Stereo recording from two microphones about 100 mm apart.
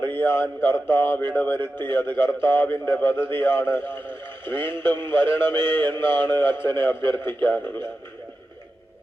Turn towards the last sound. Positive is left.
turn(degrees=20)  # may be behind; listen again after turning